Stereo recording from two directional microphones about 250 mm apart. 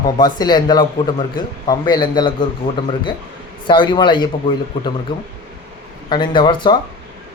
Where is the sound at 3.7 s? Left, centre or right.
Centre.